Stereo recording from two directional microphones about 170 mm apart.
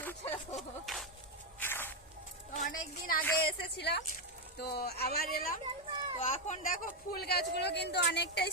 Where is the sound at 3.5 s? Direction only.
70° left (ahead or behind).